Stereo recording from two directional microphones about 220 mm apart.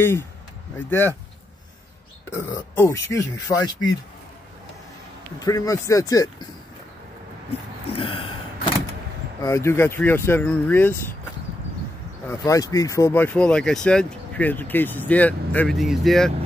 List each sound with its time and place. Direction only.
0.0 s speech: 10° left (ahead or behind)
2.3 s speech: 10° left (ahead or behind)
5.4 s speech: 15° left (ahead or behind)
7.9 s a sound: 25° left (ahead or behind)
9.4 s speech: 15° left (ahead or behind)
12.3 s speech: 15° left (ahead or behind)